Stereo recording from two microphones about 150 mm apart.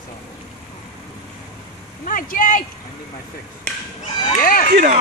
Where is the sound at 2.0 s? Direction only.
65° left (ahead or behind).